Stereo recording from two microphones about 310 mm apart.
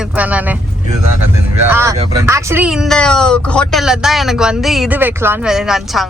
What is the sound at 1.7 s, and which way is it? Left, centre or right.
A woman's voice, centre.